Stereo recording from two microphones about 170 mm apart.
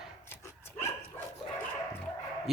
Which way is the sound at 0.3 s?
15° left (ahead or behind).